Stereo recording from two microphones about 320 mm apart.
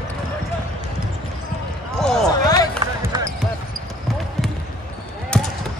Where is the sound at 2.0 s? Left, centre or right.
Centre.